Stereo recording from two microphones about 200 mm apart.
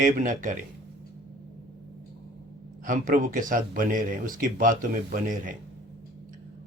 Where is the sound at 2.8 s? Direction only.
40° right (ahead or behind).